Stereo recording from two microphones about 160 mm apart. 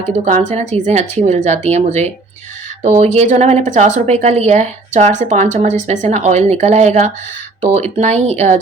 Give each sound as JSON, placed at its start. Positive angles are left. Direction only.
{"t": 0.3, "sound": "a woman's voice", "side_deg": -50}